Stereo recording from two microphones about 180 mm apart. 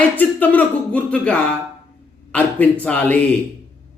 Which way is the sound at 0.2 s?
10° left (ahead or behind).